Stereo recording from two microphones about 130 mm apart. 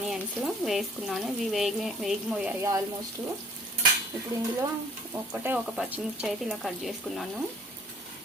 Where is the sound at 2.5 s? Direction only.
20° right (ahead or behind).